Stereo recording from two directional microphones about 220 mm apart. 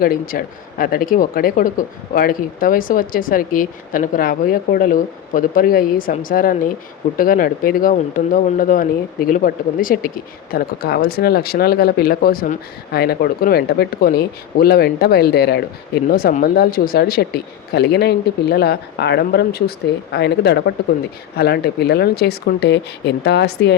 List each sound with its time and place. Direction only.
0.0 s speech: 40° left (ahead or behind)